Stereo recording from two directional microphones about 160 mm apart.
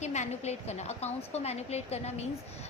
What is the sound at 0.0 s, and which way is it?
Speech, 45° left (ahead or behind).